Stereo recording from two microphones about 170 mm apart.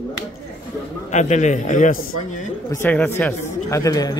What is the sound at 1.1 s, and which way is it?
Speech, 45° left (ahead or behind).